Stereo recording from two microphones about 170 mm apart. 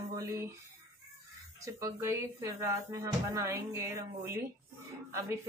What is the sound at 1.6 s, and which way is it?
Speech, 20° right (ahead or behind).